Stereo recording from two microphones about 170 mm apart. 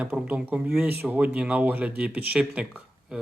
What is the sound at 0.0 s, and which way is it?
Speech, 10° right (ahead or behind).